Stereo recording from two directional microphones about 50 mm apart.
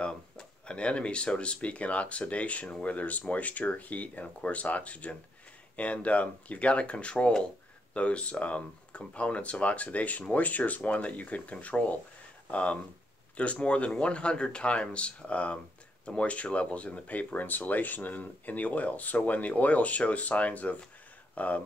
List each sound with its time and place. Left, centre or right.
0.0 s speech: centre